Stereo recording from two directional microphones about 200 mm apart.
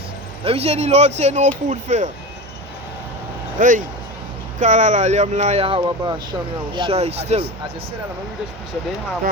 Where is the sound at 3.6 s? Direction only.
40° right (ahead or behind).